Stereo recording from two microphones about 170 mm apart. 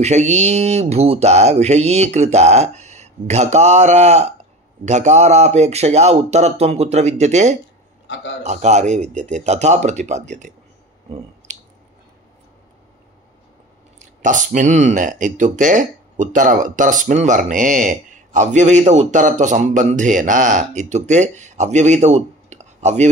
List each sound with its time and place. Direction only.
0.0 s speech: 40° right (ahead or behind)
11.5 s squish: 45° right (ahead or behind)
13.9 s speech: 50° right (ahead or behind)